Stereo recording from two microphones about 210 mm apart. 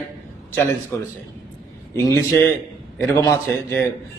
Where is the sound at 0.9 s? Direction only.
10° left (ahead or behind).